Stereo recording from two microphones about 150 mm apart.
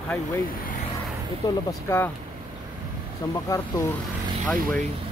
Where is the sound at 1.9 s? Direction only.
15° left (ahead or behind).